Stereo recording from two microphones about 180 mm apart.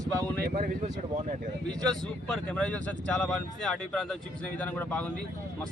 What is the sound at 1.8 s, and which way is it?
Speech, 5° left (ahead or behind).